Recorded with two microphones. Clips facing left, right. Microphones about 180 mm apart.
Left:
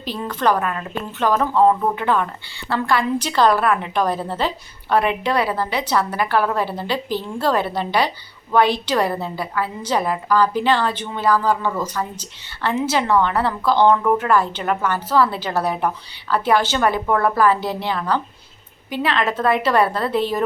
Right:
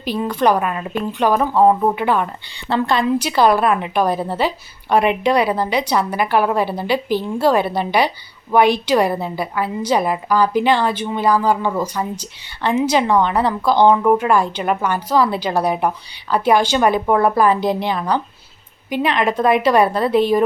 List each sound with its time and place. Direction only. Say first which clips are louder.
0.0 s a woman's voice: right 4 dB; 15° right (ahead or behind)
3.2 s a woman's voice: right 2 dB; 10° right (ahead or behind)